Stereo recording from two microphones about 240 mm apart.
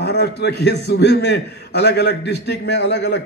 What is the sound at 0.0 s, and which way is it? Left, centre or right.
A man's voice, left.